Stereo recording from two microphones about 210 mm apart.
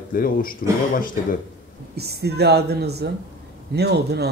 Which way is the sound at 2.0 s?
50° right (ahead or behind).